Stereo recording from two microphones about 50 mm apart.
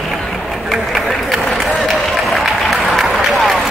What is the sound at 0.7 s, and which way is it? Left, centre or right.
Run, centre.